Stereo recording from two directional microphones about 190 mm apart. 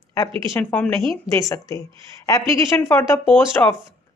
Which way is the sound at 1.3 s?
15° left (ahead or behind).